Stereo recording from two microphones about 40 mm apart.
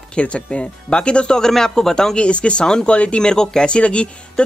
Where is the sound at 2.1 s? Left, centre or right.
Left.